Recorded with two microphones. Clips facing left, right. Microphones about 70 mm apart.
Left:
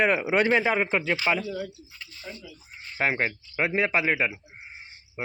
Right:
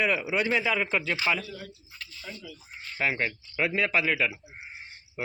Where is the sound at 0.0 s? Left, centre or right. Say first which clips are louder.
Left 4 dB; left.